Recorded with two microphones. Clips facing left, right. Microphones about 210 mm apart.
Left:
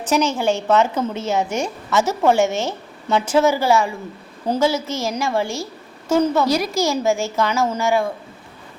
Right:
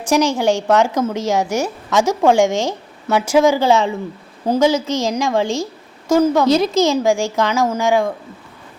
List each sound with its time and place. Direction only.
0.0 s speech: 10° right (ahead or behind)
6.4 s speech: 20° right (ahead or behind)